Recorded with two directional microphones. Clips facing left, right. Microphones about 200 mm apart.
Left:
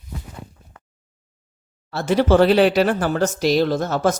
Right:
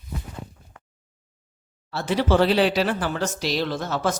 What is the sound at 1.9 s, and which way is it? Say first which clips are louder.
Speech: left 5 dB; 45° left (ahead or behind).